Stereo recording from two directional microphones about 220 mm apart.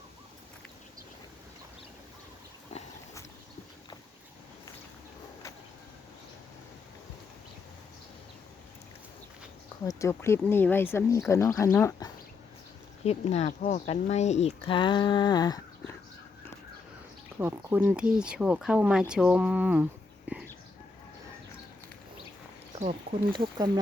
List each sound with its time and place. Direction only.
9.8 s speech: 15° left (ahead or behind)
13.1 s speech: 30° left (ahead or behind)
17.4 s speech: 10° right (ahead or behind)
20.3 s a sound: 5° right (ahead or behind)
22.8 s speech: 25° right (ahead or behind)